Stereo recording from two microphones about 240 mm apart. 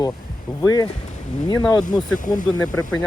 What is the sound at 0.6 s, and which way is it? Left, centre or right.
Speech, centre.